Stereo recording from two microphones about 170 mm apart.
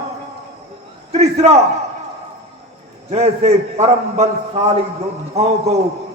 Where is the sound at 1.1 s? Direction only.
40° right (ahead or behind).